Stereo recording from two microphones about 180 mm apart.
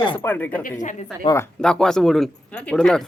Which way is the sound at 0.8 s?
45° left (ahead or behind).